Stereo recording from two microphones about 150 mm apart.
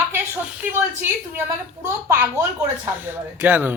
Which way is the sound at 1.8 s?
15° right (ahead or behind).